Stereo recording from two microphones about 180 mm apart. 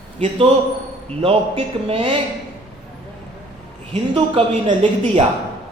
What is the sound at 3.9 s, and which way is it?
Speech, 30° right (ahead or behind).